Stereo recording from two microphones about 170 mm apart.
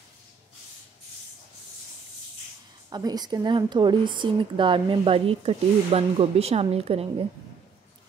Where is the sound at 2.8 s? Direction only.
25° right (ahead or behind).